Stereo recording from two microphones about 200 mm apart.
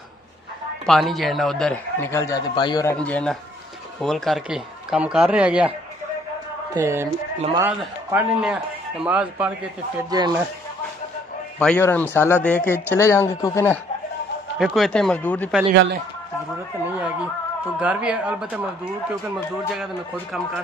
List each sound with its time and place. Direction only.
0.8 s a man's voice: centre (ahead or behind)
6.7 s a man's voice: 15° right (ahead or behind)
10.0 s speech: 20° right (ahead or behind)
11.6 s speech: 10° left (ahead or behind)
14.6 s a man's voice: centre (ahead or behind)
15.7 s speech: 60° right (ahead or behind)
17.7 s a man's voice: 5° right (ahead or behind)